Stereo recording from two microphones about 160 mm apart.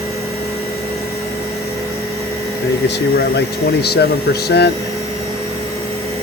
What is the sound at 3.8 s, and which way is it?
Speech, 90° left.